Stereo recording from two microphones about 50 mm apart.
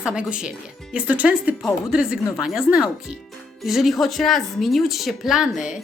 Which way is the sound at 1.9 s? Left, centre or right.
Centre.